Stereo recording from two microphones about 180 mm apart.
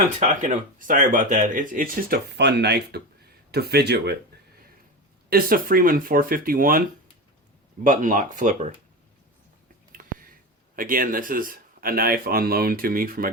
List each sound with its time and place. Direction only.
0.2 s speech: 40° right (ahead or behind); by 4.2 s 65° right (ahead or behind)
5.3 s speech: 55° right (ahead or behind)
7.9 s speech: 45° right (ahead or behind)
9.9 s a sound: 50° right (ahead or behind)
10.8 s speech: 50° right (ahead or behind)